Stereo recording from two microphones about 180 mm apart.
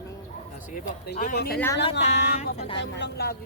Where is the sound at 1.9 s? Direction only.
40° left (ahead or behind).